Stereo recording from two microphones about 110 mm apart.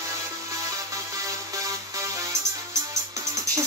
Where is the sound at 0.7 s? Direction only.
30° right (ahead or behind).